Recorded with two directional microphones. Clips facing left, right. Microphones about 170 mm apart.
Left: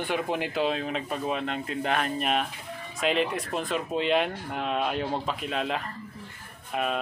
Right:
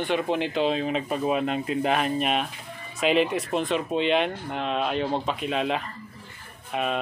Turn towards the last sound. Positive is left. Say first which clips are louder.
# right 2 dB
turn(degrees=0)  # may be behind; listen again after turning